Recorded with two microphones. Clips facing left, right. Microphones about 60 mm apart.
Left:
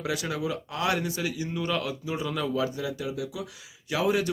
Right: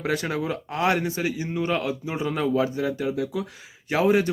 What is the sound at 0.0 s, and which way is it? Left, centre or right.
Speech, right.